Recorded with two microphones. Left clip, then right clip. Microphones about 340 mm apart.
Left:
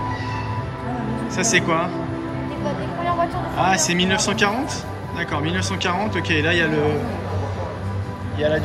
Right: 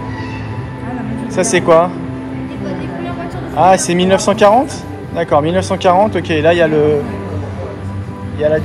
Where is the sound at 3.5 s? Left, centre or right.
Centre.